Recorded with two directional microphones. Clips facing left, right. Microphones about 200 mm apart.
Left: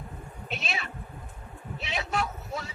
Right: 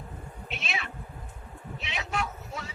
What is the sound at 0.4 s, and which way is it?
Cat, 40° left (ahead or behind).